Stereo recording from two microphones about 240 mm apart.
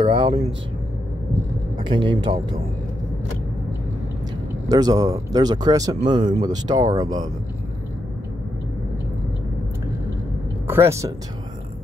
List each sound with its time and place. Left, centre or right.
0.0 s speech: right
1.8 s a man's voice: centre
4.6 s speech: centre
10.7 s speech: centre